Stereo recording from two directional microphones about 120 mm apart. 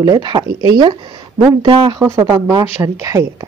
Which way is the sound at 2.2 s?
30° right (ahead or behind).